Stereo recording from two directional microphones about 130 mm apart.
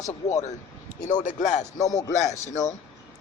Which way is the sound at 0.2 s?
25° left (ahead or behind).